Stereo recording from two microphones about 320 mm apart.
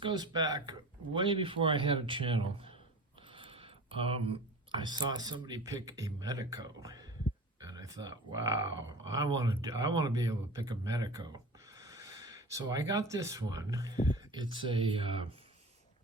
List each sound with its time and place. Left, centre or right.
0.0 s speech: centre